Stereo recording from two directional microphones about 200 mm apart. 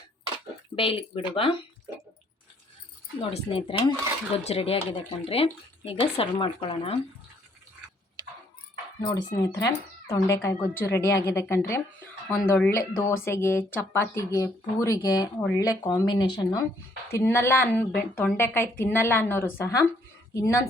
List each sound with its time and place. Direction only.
0.8 s speech: 25° left (ahead or behind)
3.2 s speech: 25° left (ahead or behind)
9.3 s speech: 15° left (ahead or behind)